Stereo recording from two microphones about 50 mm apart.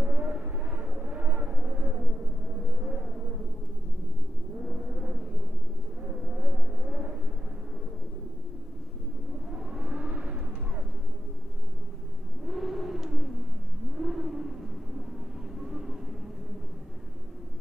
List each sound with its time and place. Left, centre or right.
0.0 s vehicle: right
4.8 s vehicle: centre
9.5 s vehicle: centre
12.4 s a sound: centre
13.9 s vehicle: centre
15.6 s vehicle: centre